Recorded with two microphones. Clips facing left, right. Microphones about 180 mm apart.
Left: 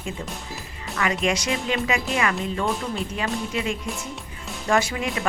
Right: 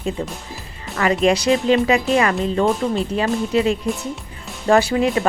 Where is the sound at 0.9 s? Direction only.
35° right (ahead or behind).